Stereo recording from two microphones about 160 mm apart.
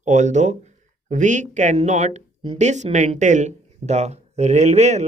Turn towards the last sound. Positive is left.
turn(degrees=-45)  # may be behind; listen again after turning